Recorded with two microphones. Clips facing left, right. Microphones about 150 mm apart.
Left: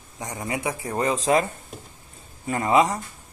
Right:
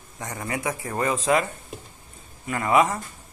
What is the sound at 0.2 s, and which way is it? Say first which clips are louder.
A man's voice: left 1 dB; 20° left (ahead or behind).